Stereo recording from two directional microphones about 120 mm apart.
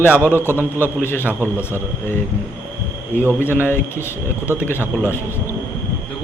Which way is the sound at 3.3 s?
20° left (ahead or behind).